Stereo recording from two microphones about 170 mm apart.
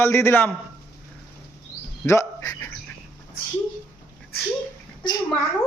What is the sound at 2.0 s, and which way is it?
Speech, 15° left (ahead or behind).